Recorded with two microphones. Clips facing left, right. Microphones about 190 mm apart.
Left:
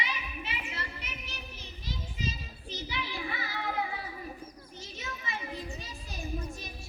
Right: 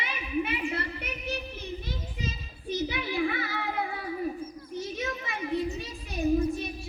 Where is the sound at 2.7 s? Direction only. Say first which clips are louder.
Right 8 dB; 55° right (ahead or behind).